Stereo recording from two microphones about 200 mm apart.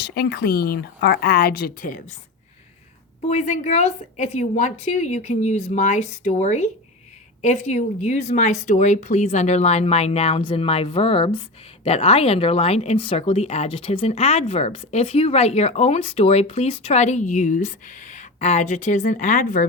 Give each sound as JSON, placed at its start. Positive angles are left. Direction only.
{"t": 0.0, "sound": "speech", "side_deg": 55}
{"t": 3.2, "sound": "speech", "side_deg": 35}